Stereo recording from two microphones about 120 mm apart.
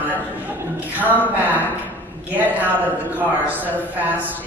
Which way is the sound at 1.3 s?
15° right (ahead or behind).